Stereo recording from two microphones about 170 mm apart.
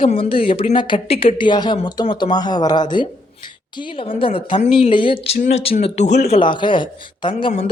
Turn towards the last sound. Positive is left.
turn(degrees=40)  # may be behind; listen again after turning